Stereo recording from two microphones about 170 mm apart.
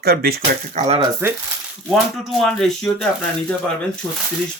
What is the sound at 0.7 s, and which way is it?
Speech, 40° right (ahead or behind).